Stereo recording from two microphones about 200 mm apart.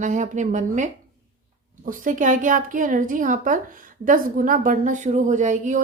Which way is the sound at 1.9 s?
40° right (ahead or behind).